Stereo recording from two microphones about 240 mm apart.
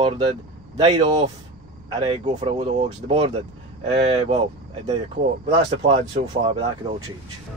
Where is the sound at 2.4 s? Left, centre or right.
Centre.